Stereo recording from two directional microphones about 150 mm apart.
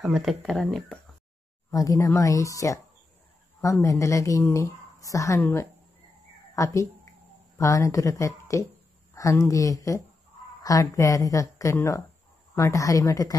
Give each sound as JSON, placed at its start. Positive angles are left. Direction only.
{"t": 0.0, "sound": "speech", "side_deg": 0}
{"t": 1.7, "sound": "speech", "side_deg": 25}
{"t": 3.8, "sound": "speech", "side_deg": 20}